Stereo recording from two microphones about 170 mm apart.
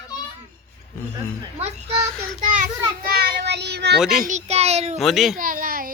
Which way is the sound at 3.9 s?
Centre (ahead or behind).